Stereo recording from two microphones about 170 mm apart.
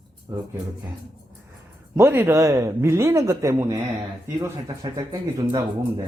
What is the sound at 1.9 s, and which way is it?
Speech, 15° right (ahead or behind).